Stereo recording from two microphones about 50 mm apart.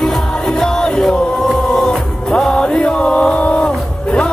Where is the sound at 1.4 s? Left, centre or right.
Centre.